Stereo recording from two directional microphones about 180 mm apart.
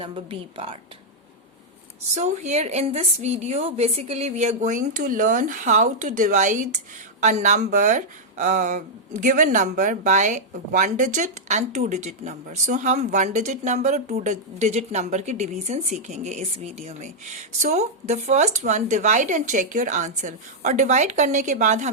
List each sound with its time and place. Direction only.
0.0 s speech: 30° right (ahead or behind)
2.1 s speech: 40° right (ahead or behind)